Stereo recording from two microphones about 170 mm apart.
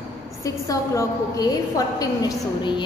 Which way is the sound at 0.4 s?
20° left (ahead or behind).